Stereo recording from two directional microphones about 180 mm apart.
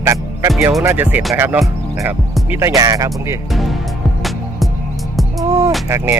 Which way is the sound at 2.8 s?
20° right (ahead or behind).